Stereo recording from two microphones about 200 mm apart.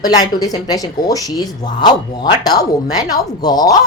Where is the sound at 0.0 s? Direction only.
20° left (ahead or behind).